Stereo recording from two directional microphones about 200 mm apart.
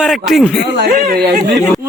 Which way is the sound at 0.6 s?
50° right (ahead or behind).